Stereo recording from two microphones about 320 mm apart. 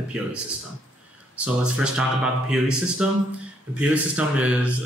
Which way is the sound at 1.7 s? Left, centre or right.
Centre.